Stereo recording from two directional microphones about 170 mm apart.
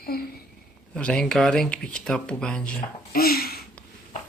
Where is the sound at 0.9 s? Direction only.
5° left (ahead or behind).